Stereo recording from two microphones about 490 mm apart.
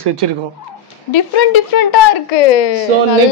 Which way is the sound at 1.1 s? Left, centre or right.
Left.